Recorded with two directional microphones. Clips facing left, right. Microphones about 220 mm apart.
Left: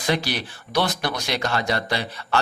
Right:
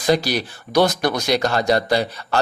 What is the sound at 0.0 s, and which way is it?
A man's voice, 40° right (ahead or behind).